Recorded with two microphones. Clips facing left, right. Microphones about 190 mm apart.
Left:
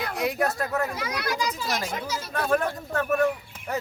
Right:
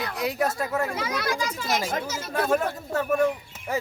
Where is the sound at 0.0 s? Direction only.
55° left (ahead or behind).